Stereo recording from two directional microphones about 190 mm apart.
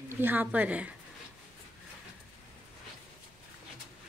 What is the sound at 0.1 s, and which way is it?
Speech, 10° right (ahead or behind).